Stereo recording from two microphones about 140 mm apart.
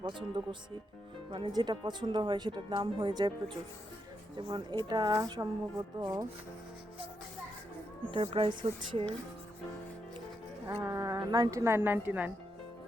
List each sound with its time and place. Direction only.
0.0 s a woman's voice: 35° right (ahead or behind)
8.1 s speech: 45° right (ahead or behind)
10.8 s a woman's voice: 25° right (ahead or behind)